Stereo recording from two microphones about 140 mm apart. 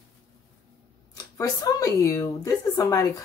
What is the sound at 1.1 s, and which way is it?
Speech, 25° left (ahead or behind).